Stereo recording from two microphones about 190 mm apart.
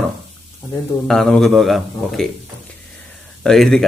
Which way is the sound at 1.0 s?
5° left (ahead or behind).